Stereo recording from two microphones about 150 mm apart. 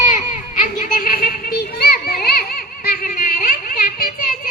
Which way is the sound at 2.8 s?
70° left (ahead or behind).